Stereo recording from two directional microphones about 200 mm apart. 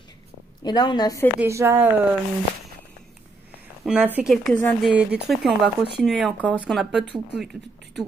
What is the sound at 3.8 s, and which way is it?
A woman's voice, 5° right (ahead or behind).